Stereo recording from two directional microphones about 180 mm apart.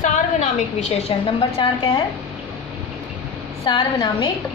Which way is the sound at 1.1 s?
30° left (ahead or behind).